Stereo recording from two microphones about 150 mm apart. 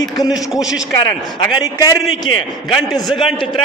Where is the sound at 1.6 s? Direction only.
25° left (ahead or behind).